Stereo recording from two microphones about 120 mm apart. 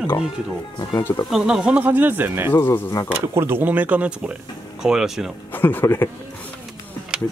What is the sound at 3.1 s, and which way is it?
Speech, 20° right (ahead or behind).